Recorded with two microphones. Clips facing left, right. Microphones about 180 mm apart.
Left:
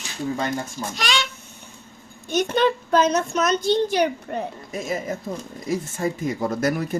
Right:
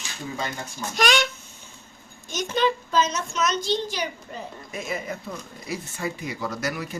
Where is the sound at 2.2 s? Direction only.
60° left (ahead or behind).